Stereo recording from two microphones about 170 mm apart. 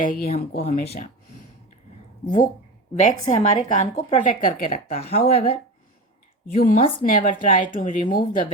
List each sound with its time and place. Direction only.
0.0 s speech: 55° left (ahead or behind)
0.6 s speech: 40° left (ahead or behind)
2.2 s speech: 50° left (ahead or behind)
4.9 s speech: 35° left (ahead or behind)
6.5 s speech: 40° left (ahead or behind)
7.0 s speech: 55° left (ahead or behind)